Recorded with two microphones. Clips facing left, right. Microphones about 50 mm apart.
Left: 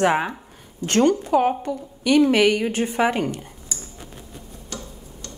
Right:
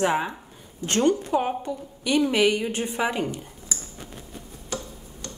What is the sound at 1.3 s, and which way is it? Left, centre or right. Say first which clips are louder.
Speech: left 6 dB; left.